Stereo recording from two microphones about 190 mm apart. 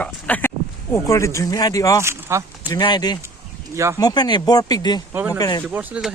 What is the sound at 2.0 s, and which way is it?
Speech, 15° right (ahead or behind).